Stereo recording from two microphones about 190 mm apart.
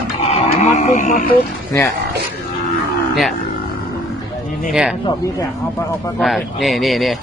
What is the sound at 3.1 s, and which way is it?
Speech, centre (ahead or behind).